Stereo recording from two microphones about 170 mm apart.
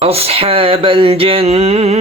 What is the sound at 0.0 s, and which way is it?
Speech, 35° right (ahead or behind).